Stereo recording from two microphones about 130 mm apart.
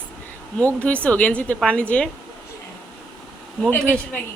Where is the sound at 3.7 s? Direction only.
10° left (ahead or behind).